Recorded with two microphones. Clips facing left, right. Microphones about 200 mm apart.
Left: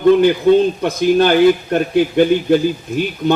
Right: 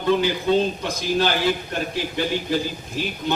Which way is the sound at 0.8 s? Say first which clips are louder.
Left 9 dB; 55° left (ahead or behind).